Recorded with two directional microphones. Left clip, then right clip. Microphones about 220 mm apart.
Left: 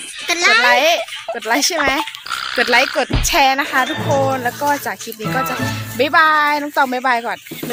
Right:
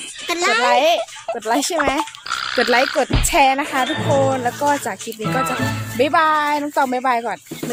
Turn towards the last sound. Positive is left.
turn(degrees=5)  # may be behind; listen again after turning